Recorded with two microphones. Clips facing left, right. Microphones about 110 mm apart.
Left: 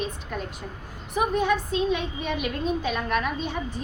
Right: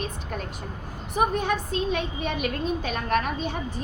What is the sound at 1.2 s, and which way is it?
A woman's voice, 45° right (ahead or behind).